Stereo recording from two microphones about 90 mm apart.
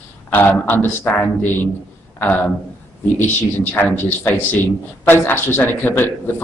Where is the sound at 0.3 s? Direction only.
20° left (ahead or behind).